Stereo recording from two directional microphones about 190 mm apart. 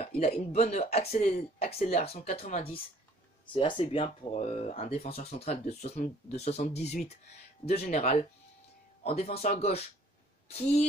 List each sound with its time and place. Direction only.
0.0 s speech: 35° left (ahead or behind)
3.5 s speech: 25° left (ahead or behind)
9.0 s speech: 35° left (ahead or behind)